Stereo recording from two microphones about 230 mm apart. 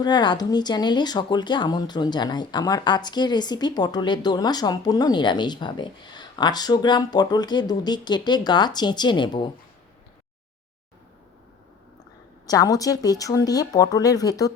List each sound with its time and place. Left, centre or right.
0.0 s speech: centre
12.5 s speech: centre